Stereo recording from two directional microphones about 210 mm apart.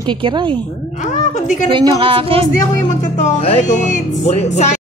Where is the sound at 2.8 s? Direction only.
35° left (ahead or behind).